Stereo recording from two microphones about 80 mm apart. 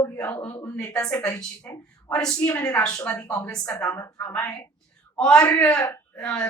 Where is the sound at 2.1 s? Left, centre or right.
Centre.